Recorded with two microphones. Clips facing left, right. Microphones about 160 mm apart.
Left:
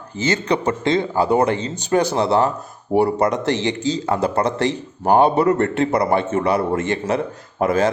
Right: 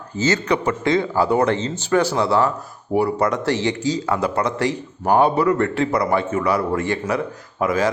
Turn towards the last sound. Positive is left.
turn(degrees=30)  # may be behind; listen again after turning